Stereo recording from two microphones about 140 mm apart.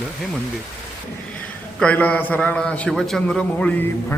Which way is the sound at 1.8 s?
10° left (ahead or behind).